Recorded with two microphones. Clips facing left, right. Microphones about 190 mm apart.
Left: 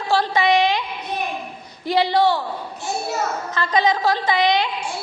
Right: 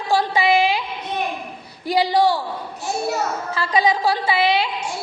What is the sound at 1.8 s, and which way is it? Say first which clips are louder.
Speech: even; 10° right (ahead or behind).